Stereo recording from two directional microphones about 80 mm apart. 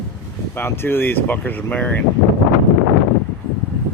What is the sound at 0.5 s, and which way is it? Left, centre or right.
Speech, left.